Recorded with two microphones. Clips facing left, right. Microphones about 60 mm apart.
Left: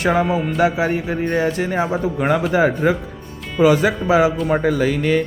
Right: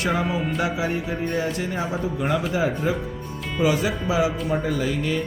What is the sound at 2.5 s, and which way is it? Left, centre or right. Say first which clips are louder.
Speech: left 7 dB; left.